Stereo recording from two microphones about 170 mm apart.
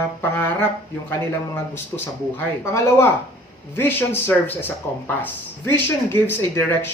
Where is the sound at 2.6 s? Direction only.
15° left (ahead or behind).